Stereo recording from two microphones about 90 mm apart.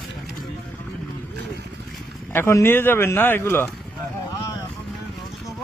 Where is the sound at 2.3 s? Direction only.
30° left (ahead or behind).